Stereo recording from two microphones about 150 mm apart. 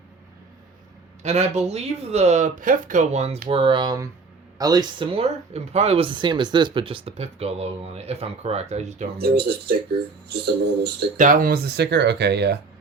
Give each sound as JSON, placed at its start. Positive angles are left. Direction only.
{"t": 1.2, "sound": "speech", "side_deg": -50}
{"t": 3.5, "sound": "speech", "side_deg": -35}
{"t": 9.1, "sound": "speech", "side_deg": -90}
{"t": 11.2, "sound": "speech", "side_deg": -65}